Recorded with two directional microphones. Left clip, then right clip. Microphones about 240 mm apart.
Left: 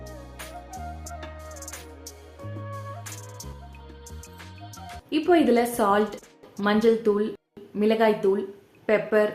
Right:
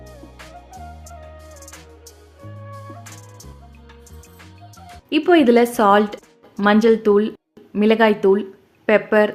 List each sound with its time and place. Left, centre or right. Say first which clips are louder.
0.0 s music: even; centre
5.0 s a woman's voice: right 6 dB; right